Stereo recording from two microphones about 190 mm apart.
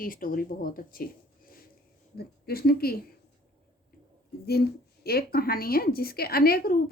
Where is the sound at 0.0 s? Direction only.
50° left (ahead or behind).